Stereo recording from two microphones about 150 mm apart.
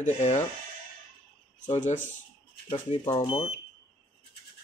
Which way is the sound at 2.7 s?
30° left (ahead or behind).